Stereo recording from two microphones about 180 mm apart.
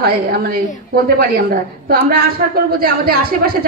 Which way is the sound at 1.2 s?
55° right (ahead or behind).